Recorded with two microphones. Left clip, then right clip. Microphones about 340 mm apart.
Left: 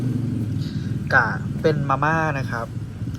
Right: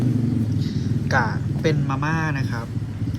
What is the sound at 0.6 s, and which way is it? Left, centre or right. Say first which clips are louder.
Speech: right 3 dB; centre.